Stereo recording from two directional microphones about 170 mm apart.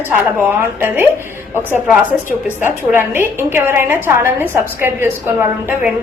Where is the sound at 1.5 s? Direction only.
10° right (ahead or behind).